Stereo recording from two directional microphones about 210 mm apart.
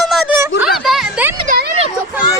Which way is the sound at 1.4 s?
50° right (ahead or behind).